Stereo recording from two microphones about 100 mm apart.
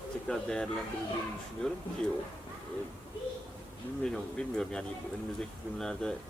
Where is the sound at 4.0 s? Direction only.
5° left (ahead or behind).